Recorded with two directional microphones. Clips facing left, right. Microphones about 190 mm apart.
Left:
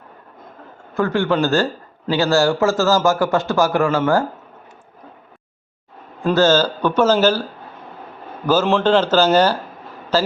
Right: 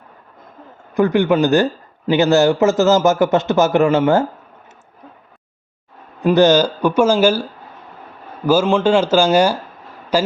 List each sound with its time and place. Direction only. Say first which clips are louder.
0.9 s a man's voice: right 4 dB; 20° right (ahead or behind)
6.2 s speech: right 3 dB; 15° right (ahead or behind)
8.8 s a man's voice: right 1 dB; 10° right (ahead or behind)